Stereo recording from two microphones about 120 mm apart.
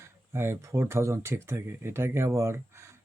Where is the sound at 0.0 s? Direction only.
20° right (ahead or behind).